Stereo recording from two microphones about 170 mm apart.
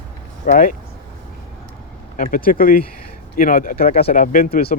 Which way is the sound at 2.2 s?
55° left (ahead or behind).